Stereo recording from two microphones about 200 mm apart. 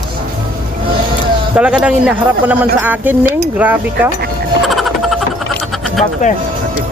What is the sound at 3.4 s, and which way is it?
Mechanisms, 10° right (ahead or behind).